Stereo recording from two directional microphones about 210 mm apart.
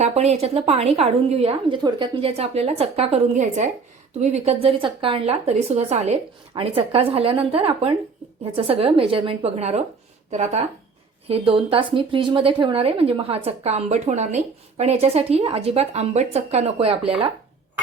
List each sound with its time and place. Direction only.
0.0 s speech: 30° right (ahead or behind)